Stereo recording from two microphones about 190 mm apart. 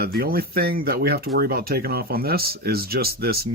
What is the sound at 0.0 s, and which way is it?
Speech, 55° right (ahead or behind).